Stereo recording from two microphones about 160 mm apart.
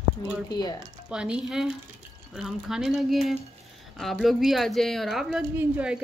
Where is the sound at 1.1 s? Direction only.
5° right (ahead or behind).